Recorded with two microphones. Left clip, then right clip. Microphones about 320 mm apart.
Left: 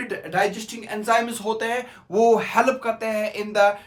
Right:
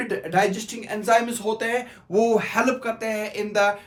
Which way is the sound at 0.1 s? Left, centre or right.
Centre.